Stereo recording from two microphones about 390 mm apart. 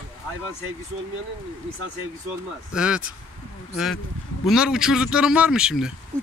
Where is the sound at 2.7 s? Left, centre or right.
Centre.